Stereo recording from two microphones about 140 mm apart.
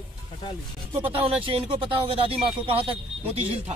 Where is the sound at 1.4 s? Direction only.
40° right (ahead or behind).